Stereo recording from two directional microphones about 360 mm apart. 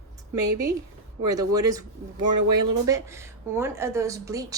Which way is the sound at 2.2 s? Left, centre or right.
Right.